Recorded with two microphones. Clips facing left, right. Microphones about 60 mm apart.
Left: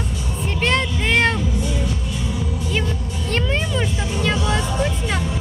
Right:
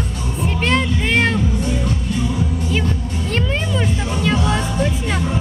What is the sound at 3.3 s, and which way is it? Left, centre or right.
Music, centre.